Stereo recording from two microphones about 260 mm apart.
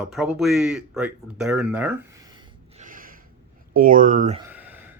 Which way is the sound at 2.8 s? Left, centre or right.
Right.